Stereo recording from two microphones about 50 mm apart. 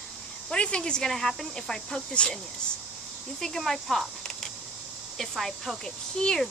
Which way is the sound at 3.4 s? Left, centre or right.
Centre.